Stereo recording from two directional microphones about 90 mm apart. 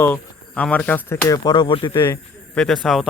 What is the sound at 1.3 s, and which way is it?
Speech, 50° left (ahead or behind).